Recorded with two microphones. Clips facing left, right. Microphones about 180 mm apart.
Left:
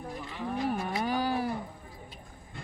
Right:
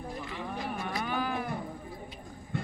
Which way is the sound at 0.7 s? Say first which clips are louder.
Left 3 dB; 35° left (ahead or behind).